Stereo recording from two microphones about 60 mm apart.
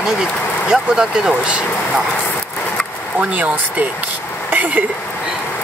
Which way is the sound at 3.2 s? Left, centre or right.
Right.